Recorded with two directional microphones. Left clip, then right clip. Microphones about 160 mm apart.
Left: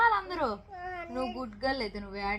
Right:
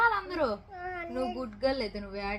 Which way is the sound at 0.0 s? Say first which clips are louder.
Left 1 dB; 20° left (ahead or behind).